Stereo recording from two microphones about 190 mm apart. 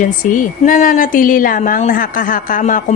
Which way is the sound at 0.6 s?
45° left (ahead or behind).